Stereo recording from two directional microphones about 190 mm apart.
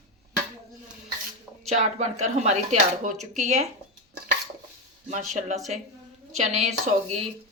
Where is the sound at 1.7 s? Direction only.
40° right (ahead or behind).